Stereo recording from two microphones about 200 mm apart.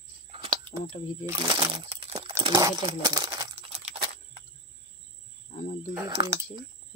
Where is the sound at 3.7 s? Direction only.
30° right (ahead or behind).